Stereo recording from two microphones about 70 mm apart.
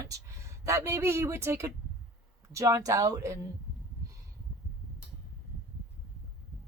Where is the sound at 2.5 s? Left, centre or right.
Right.